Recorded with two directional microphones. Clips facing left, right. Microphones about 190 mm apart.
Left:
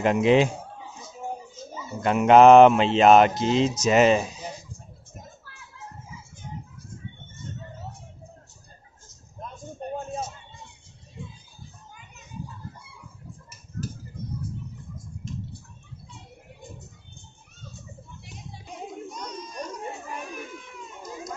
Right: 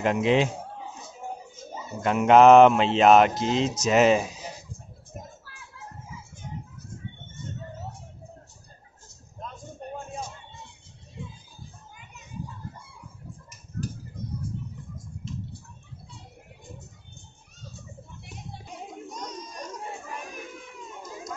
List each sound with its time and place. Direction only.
0.0 s speech: 5° left (ahead or behind)
1.0 s a sound: 50° right (ahead or behind)
2.0 s speech: centre (ahead or behind)